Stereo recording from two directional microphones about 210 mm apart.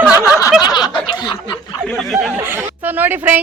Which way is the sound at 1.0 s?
20° left (ahead or behind).